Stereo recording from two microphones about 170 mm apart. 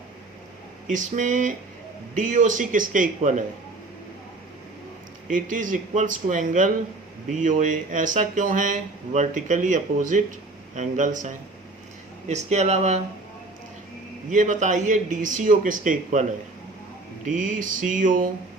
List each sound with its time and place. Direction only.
0.9 s speech: 50° right (ahead or behind)
5.3 s speech: 50° right (ahead or behind)
14.3 s speech: 45° right (ahead or behind)
17.2 s speech: 50° right (ahead or behind)